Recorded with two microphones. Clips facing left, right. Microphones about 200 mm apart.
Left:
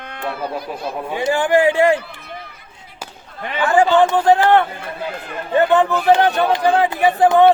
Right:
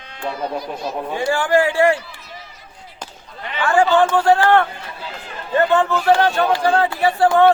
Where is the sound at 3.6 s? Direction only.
20° left (ahead or behind).